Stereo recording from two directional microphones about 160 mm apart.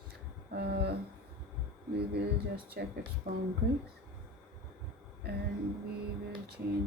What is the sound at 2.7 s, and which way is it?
Speech, 80° right.